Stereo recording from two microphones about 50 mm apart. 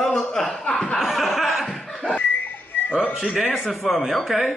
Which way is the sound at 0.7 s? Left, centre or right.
Left.